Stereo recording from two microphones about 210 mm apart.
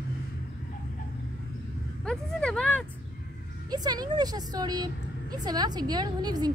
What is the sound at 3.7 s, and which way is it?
A woman's voice, 20° right (ahead or behind).